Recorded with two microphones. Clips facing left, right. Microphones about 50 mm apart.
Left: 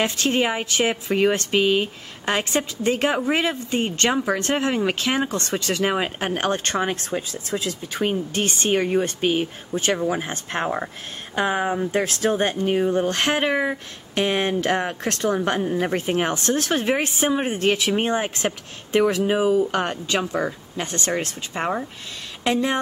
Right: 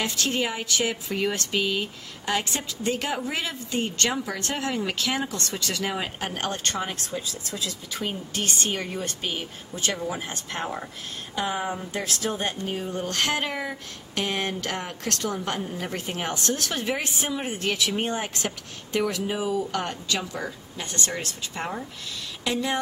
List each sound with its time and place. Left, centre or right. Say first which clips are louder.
0.0 s speech: left 5 dB; left